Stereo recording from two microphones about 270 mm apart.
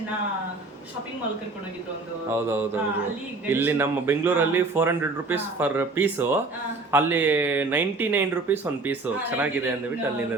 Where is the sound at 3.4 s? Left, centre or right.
Centre.